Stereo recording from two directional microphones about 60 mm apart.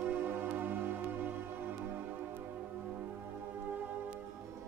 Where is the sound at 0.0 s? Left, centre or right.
Right.